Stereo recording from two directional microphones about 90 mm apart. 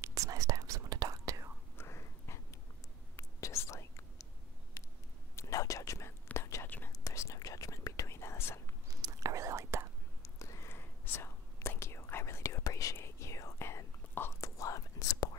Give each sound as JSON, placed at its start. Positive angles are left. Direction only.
{"t": 0.0, "sound": "whispering", "side_deg": -35}
{"t": 1.8, "sound": "a sound", "side_deg": 30}
{"t": 3.2, "sound": "whispering", "side_deg": 35}
{"t": 5.3, "sound": "whispering", "side_deg": 35}
{"t": 8.9, "sound": "whispering", "side_deg": -40}
{"t": 10.2, "sound": "whispering", "side_deg": 35}